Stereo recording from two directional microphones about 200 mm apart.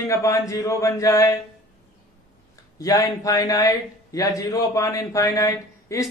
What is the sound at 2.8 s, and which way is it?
A man's voice, 15° left (ahead or behind).